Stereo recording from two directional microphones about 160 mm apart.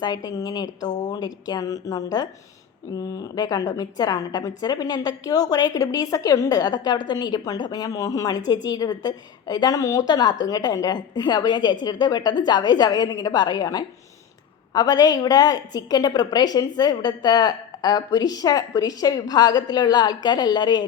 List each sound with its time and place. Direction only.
0.0 s a woman's voice: 25° left (ahead or behind)